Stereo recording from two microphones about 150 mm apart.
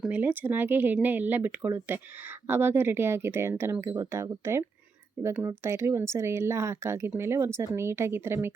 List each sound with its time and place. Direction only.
0.0 s speech: 10° right (ahead or behind)